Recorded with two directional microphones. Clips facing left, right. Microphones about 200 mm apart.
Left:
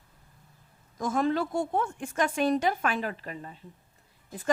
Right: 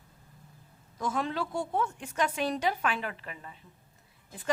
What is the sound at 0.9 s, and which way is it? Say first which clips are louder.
A woman's voice: left 5 dB; 45° left (ahead or behind).